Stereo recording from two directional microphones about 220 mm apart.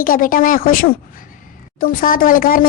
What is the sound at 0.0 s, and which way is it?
Speech, 40° left (ahead or behind).